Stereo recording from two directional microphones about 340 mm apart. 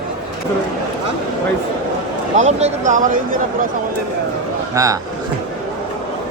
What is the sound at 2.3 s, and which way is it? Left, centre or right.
Speech, centre.